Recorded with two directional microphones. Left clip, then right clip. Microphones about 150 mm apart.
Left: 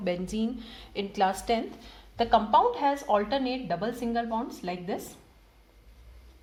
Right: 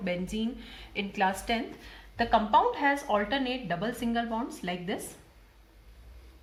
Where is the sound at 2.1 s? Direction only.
30° left (ahead or behind).